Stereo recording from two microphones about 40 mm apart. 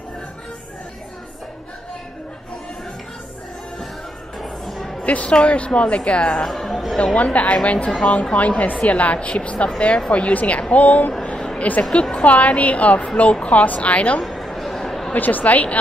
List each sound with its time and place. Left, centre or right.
4.4 s music: centre
5.0 s speech: left
6.4 s speech: centre
7.2 s a woman's voice: left
11.9 s a woman's voice: left
14.2 s chatter: centre
15.1 s a woman's voice: left